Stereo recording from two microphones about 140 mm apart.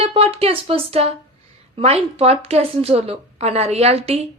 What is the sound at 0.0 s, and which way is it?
A woman's voice, 45° right (ahead or behind).